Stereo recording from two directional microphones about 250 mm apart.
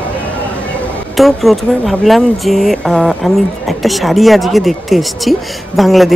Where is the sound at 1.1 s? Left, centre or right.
Centre.